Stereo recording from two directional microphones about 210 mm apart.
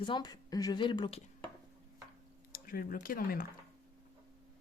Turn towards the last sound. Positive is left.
turn(degrees=45)  # may be behind; listen again after turning